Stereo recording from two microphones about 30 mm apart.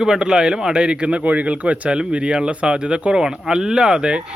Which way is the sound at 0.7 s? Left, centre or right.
Right.